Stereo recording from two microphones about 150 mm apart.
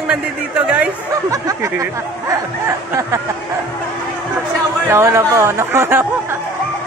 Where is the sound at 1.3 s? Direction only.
20° right (ahead or behind).